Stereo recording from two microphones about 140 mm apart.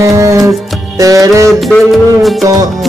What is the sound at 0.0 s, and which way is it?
Music, 20° right (ahead or behind).